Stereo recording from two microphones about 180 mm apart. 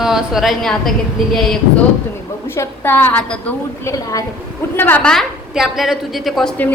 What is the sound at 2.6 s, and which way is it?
Speech, 10° left (ahead or behind).